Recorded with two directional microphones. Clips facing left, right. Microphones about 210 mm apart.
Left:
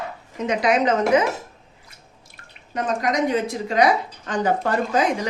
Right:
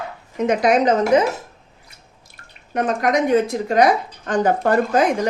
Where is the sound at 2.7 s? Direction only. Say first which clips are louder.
Right 4 dB; 60° right (ahead or behind).